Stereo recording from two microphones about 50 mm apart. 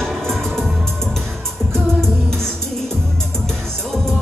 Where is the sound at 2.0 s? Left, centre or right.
Centre.